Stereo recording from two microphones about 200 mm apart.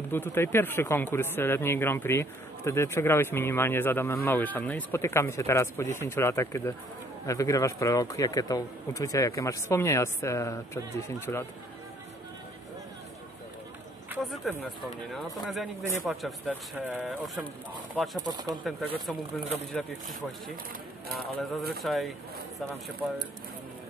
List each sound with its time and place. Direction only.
0.1 s speech: 10° left (ahead or behind)
14.2 s speech: centre (ahead or behind)
18.2 s speech: 20° right (ahead or behind)
18.6 s speech: 5° right (ahead or behind)
21.4 s speech: centre (ahead or behind)